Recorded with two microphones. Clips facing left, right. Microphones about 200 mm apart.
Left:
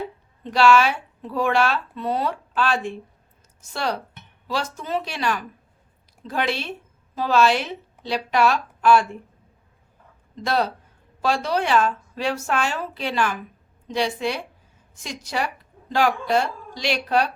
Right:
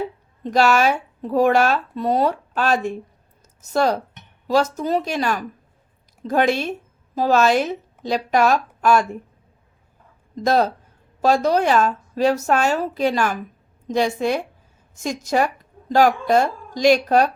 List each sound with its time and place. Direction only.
0.4 s speech: 45° right (ahead or behind)
10.3 s speech: 45° right (ahead or behind)